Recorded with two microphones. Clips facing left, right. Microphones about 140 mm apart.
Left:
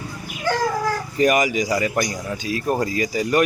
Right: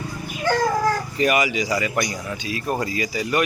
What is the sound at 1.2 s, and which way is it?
Speech, 45° left (ahead or behind).